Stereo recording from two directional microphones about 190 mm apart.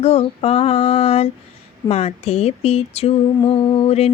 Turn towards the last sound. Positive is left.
turn(degrees=30)  # may be behind; listen again after turning